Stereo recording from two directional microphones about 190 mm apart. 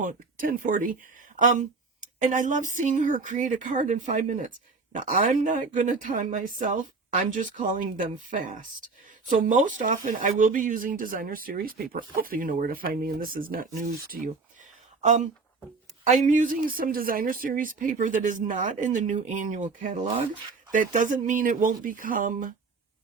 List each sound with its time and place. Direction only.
0.0 s speech: 45° right (ahead or behind)